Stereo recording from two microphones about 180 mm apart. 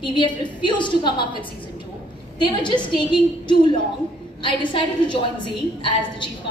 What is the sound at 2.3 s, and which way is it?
A woman's voice, 25° left (ahead or behind).